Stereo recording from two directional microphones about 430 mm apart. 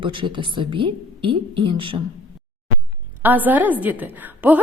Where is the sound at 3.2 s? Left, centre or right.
Centre.